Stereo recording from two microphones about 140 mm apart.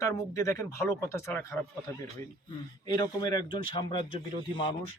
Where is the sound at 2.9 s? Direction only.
30° left (ahead or behind).